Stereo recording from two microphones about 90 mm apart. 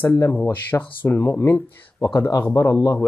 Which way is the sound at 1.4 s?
30° left (ahead or behind).